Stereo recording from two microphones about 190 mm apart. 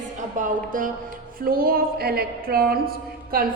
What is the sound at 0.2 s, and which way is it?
A woman's voice, 45° right (ahead or behind).